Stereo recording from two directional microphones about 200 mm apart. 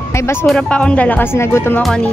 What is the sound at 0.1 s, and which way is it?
Speech, 15° left (ahead or behind).